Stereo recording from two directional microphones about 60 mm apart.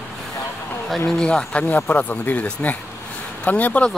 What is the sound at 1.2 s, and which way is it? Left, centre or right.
Speech, centre.